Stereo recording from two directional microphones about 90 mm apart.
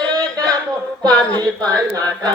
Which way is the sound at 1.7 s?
45° right (ahead or behind).